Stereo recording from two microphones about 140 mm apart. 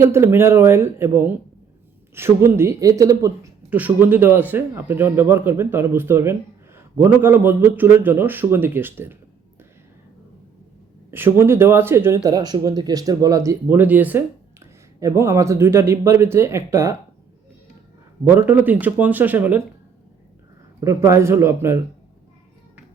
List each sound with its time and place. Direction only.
0.0 s speech: 20° right (ahead or behind)
3.7 s speech: 10° right (ahead or behind)
11.1 s speech: 15° right (ahead or behind)
18.3 s speech: 15° right (ahead or behind)
20.8 s speech: 20° right (ahead or behind)